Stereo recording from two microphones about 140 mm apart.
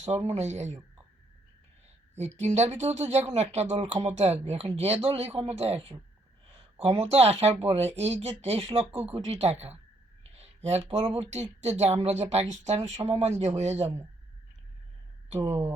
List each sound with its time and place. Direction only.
0.3 s speech: 55° right (ahead or behind)
2.1 s speech: 55° right (ahead or behind)
10.3 s a sound: 50° right (ahead or behind)
11.1 s speech: 50° right (ahead or behind)
15.4 s speech: 15° right (ahead or behind)